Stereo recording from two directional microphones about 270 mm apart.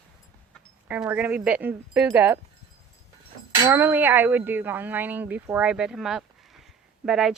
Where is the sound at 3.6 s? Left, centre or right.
Centre.